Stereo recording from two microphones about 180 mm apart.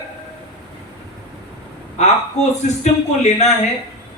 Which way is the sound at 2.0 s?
40° left (ahead or behind).